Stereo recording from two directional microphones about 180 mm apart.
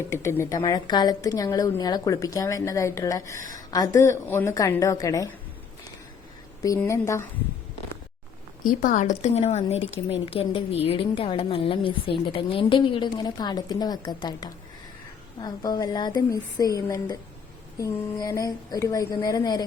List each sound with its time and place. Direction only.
0.1 s a woman's voice: 15° left (ahead or behind)
6.7 s a woman's voice: 15° left (ahead or behind)
8.6 s speech: 45° left (ahead or behind); by 19.6 s 20° left (ahead or behind)